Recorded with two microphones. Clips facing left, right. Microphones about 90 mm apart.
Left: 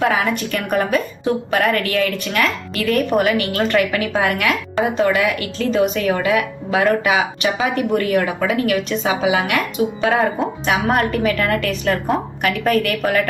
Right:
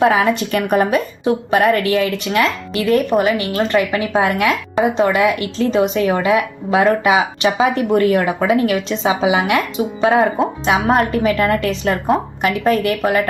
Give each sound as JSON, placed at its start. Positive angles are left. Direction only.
{"t": 0.0, "sound": "a woman's voice", "side_deg": -30}